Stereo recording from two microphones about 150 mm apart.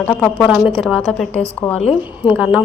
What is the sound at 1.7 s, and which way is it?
Speech, 45° left (ahead or behind).